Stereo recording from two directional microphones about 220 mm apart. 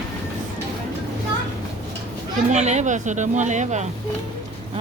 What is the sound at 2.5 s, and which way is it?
Speech, 30° right (ahead or behind).